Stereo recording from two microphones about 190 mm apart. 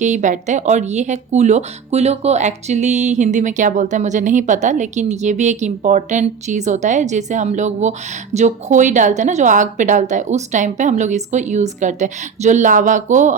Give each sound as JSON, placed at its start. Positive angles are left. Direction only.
{"t": 0.0, "sound": "speech", "side_deg": -40}